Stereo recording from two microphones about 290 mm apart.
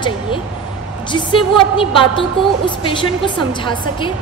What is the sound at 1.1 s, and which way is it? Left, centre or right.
A woman's voice, centre.